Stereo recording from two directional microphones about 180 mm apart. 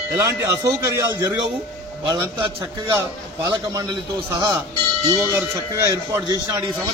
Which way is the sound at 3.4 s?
25° right (ahead or behind).